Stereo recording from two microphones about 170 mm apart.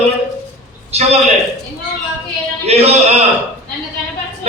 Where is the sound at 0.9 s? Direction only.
40° right (ahead or behind).